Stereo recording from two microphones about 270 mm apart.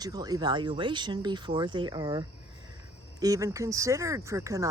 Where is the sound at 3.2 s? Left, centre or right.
Centre.